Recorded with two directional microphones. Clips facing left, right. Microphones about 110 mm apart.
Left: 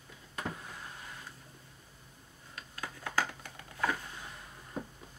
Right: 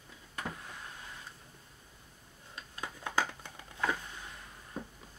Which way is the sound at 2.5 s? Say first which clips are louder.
Even; 20° right (ahead or behind).